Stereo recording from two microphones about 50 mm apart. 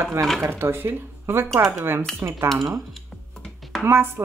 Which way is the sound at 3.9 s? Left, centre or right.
Right.